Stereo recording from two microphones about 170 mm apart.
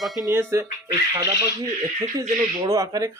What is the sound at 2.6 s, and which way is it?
Speech, 20° right (ahead or behind).